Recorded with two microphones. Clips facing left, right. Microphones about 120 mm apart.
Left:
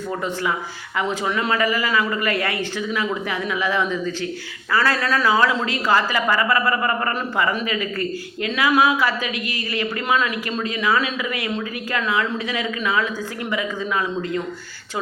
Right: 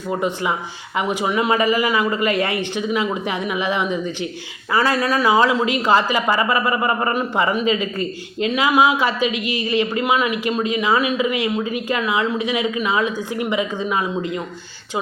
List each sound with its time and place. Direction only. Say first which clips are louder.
0.1 s speech: right 4 dB; 20° right (ahead or behind)